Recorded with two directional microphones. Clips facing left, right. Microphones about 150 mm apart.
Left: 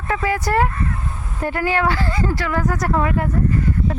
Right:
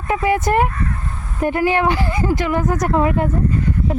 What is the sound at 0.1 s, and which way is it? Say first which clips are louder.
A woman's voice: right 3 dB; 20° right (ahead or behind).